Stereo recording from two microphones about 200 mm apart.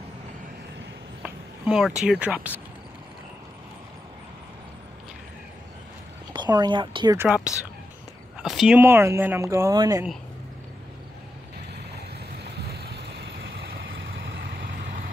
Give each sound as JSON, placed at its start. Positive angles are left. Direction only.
{"t": 1.2, "sound": "speech", "side_deg": -5}
{"t": 6.3, "sound": "speech", "side_deg": -20}
{"t": 7.3, "sound": "speech", "side_deg": -5}
{"t": 12.5, "sound": "vehicle", "side_deg": -55}